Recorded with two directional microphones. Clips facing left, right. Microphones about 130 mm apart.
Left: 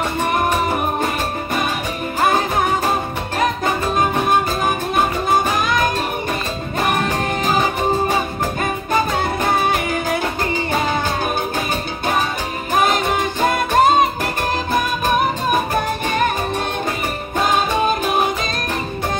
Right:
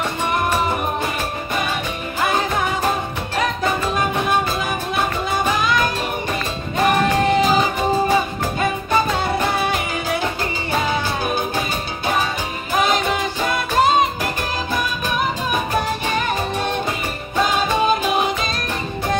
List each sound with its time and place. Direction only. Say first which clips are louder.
3.9 s music: left 3 dB; 45° left (ahead or behind)
9.2 s music: left 2 dB; 50° left (ahead or behind)
12.8 s music: left 1 dB; 50° left (ahead or behind)